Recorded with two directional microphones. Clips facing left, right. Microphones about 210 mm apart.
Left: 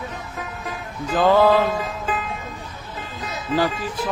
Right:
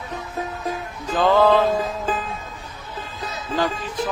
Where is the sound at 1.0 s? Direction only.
5° left (ahead or behind).